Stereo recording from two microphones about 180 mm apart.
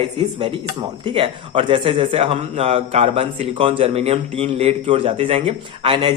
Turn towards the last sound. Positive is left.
turn(degrees=-30)  # may be behind; listen again after turning